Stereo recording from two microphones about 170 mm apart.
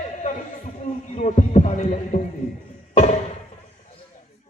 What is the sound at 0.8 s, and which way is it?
Speech, 45° left (ahead or behind).